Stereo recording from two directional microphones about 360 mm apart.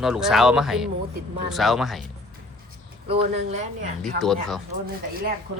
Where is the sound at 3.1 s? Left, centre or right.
Centre.